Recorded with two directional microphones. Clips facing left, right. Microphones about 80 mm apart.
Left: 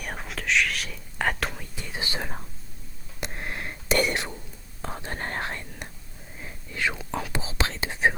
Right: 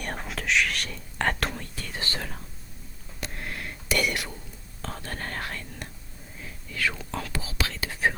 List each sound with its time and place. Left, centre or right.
0.0 s whispering: centre
1.7 s whispering: centre